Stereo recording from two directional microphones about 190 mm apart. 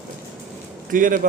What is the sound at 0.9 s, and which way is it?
Speech, 45° right (ahead or behind).